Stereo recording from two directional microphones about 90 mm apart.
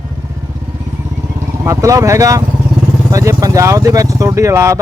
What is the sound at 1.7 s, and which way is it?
Speech, 35° right (ahead or behind).